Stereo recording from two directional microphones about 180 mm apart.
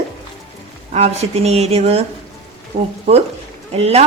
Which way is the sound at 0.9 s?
35° right (ahead or behind).